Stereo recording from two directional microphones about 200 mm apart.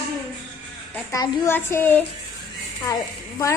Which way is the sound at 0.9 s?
15° left (ahead or behind).